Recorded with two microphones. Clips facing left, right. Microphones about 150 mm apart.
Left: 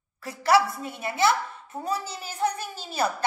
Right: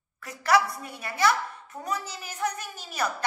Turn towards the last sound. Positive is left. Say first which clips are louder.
# left 3 dB
turn(degrees=30)  # may be behind; listen again after turning